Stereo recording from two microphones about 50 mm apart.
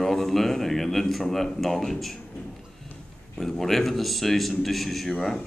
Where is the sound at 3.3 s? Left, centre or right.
Centre.